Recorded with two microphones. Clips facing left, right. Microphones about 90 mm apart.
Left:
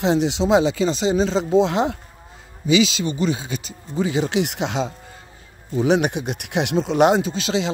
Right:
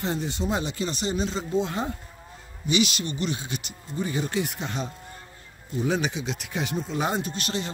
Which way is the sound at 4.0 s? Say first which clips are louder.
Left 7 dB; 90° left.